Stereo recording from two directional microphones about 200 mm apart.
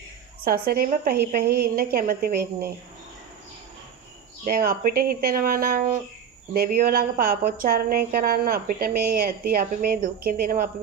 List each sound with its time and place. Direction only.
0.4 s a woman's voice: 45° right (ahead or behind)
4.4 s a woman's voice: 45° right (ahead or behind)